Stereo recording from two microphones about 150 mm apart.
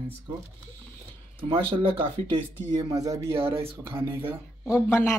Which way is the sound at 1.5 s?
35° right (ahead or behind).